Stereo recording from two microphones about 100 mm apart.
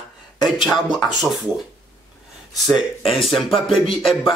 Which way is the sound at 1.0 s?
Centre (ahead or behind).